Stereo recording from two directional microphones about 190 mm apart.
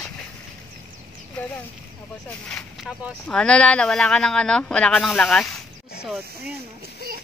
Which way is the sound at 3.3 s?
5° left (ahead or behind).